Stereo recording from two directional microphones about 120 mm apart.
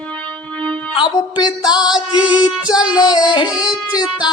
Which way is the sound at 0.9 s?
40° left (ahead or behind).